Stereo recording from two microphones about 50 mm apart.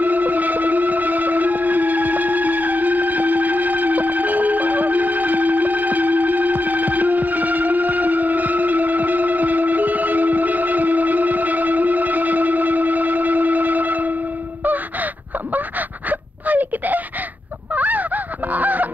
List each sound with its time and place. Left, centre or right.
0.0 s music: right
16.1 s wail: right
17.7 s a sound: right